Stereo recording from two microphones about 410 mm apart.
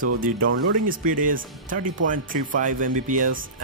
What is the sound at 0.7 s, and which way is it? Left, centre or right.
Speech, centre.